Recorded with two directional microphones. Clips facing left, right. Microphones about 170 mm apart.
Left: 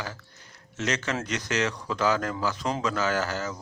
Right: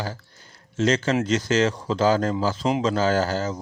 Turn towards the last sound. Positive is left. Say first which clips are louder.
# right 6 dB
turn(degrees=-30)  # may be behind; listen again after turning